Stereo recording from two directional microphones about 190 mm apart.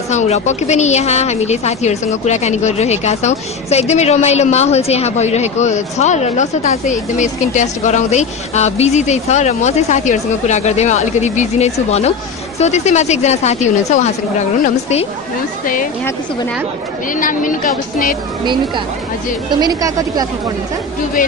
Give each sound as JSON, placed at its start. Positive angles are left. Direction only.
{"t": 0.1, "sound": "a woman's voice", "side_deg": 40}
{"t": 15.6, "sound": "a woman's voice", "side_deg": 45}
{"t": 17.1, "sound": "a woman's voice", "side_deg": 45}
{"t": 19.5, "sound": "a woman's voice", "side_deg": -20}